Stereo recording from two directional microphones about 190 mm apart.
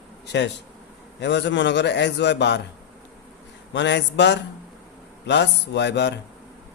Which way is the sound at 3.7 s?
70° left (ahead or behind).